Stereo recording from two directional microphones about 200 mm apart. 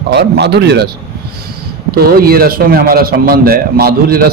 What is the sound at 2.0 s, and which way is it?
Speech, 50° right (ahead or behind).